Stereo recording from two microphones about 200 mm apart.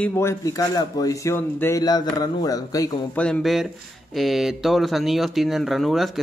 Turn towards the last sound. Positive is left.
turn(degrees=0)  # may be behind; listen again after turning